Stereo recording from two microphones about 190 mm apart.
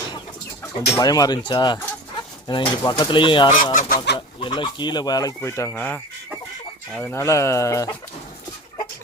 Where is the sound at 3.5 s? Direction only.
45° left (ahead or behind).